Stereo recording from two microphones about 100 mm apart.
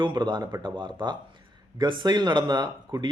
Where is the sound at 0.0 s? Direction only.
50° right (ahead or behind).